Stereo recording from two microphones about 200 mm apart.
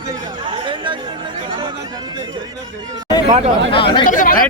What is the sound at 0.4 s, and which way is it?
Chatter, 25° right (ahead or behind).